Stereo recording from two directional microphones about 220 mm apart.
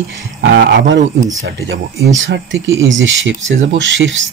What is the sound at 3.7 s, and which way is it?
Speech, 55° right (ahead or behind).